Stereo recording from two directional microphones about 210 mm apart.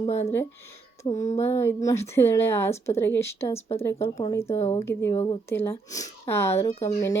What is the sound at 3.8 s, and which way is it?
Speech, 15° left (ahead or behind).